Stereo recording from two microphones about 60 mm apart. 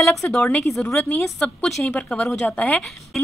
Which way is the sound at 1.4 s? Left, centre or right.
Centre.